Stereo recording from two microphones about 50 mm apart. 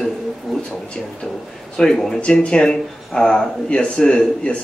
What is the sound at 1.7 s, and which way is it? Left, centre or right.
Speech, centre.